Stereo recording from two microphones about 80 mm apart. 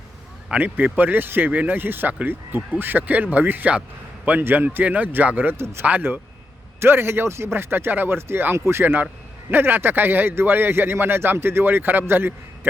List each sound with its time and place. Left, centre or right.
0.5 s speech: centre
5.5 s speech: right